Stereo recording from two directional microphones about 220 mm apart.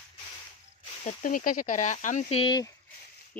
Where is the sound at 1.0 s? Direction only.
35° left (ahead or behind).